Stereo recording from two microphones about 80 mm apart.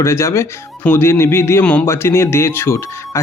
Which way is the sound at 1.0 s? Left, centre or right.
Left.